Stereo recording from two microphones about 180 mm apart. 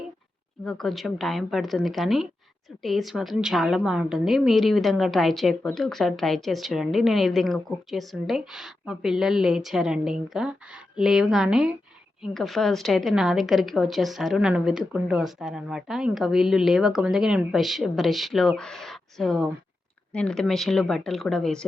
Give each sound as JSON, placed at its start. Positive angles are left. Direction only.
{"t": 0.6, "sound": "a woman's voice", "side_deg": 5}